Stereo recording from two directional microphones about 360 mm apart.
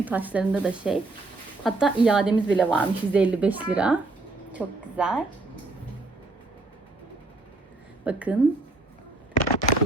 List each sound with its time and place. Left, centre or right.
0.0 s a woman's voice: centre
8.0 s a woman's voice: centre
9.3 s a sound: left